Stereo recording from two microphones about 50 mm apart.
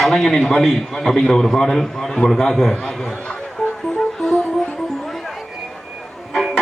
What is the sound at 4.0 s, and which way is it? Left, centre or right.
Music, centre.